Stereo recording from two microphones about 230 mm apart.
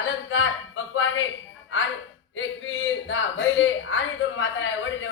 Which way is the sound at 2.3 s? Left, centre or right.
Left.